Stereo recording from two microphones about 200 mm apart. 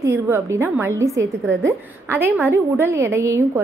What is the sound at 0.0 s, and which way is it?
A woman's voice, 15° right (ahead or behind).